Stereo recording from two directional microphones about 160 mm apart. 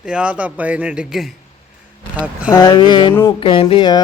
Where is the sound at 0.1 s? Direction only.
5° right (ahead or behind).